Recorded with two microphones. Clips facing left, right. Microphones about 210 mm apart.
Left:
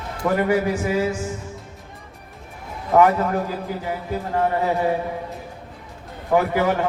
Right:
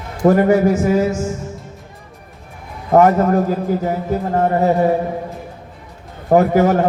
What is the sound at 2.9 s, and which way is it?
A man's voice, 45° right (ahead or behind).